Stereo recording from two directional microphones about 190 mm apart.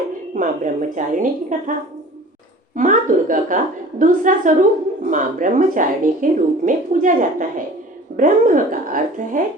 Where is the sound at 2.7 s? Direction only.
45° right (ahead or behind).